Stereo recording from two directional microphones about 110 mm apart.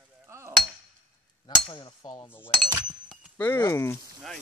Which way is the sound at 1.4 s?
40° left (ahead or behind).